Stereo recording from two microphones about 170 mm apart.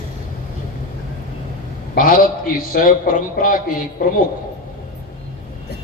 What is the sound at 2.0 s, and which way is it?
A man's voice, 55° left (ahead or behind).